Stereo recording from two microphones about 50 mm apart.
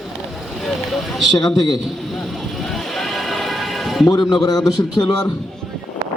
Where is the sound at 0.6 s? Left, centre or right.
Centre.